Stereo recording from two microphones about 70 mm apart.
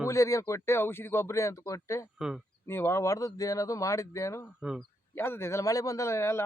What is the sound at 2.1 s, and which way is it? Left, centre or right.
Speech, centre.